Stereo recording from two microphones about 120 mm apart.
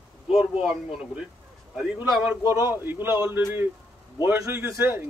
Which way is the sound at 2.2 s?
20° right (ahead or behind).